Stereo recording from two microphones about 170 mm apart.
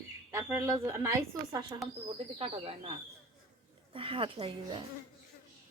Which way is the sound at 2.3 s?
35° right (ahead or behind).